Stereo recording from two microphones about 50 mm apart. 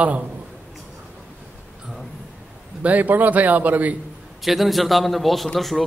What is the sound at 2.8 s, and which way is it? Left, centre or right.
A man's voice, right.